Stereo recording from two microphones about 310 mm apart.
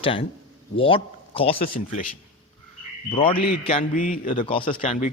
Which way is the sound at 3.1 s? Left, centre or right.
Centre.